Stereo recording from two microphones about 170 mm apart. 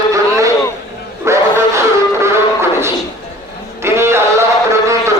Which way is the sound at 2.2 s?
15° right (ahead or behind).